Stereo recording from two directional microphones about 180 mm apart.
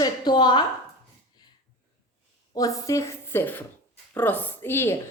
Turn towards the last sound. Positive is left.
turn(degrees=15)  # may be behind; listen again after turning